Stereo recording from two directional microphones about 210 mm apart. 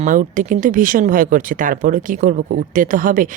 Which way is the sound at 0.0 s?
35° right (ahead or behind).